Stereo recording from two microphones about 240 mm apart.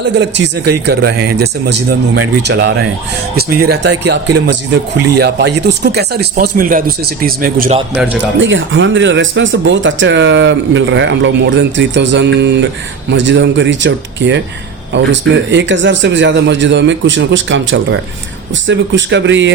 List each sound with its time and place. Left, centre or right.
0.2 s speech: right
7.9 s speech: centre
8.4 s speech: right